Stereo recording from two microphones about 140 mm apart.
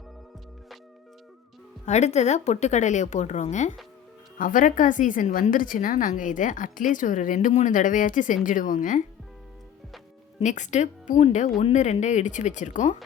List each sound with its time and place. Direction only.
1.8 s speech: 55° left (ahead or behind)
4.4 s a woman's voice: 70° left (ahead or behind)
10.4 s speech: 60° left (ahead or behind)